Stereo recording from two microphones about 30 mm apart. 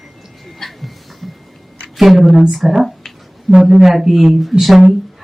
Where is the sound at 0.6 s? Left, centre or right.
Centre.